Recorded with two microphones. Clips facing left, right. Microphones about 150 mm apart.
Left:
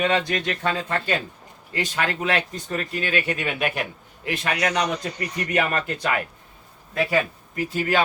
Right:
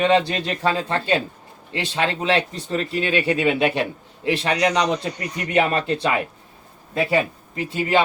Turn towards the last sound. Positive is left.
turn(degrees=-25)  # may be behind; listen again after turning